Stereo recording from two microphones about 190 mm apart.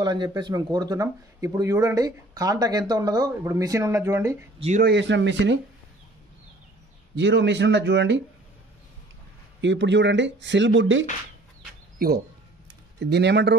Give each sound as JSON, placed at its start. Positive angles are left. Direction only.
{"t": 0.0, "sound": "speech", "side_deg": -20}
{"t": 4.6, "sound": "speech", "side_deg": -35}
{"t": 4.8, "sound": "speech", "side_deg": -70}
{"t": 7.2, "sound": "speech", "side_deg": -65}
{"t": 9.6, "sound": "speech", "side_deg": -75}
{"t": 13.0, "sound": "speech", "side_deg": -60}